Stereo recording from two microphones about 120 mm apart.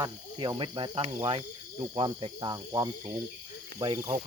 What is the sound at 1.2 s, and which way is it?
Speech, 50° right (ahead or behind).